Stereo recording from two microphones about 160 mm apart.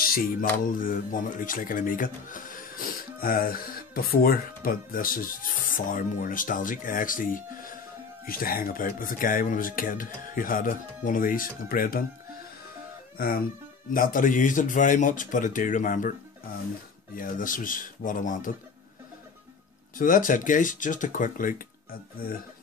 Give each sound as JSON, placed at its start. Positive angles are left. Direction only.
{"t": 0.0, "sound": "mantra", "side_deg": 65}
{"t": 0.7, "sound": "speech", "side_deg": 60}
{"t": 13.9, "sound": "speech", "side_deg": 60}
{"t": 20.0, "sound": "speech", "side_deg": 55}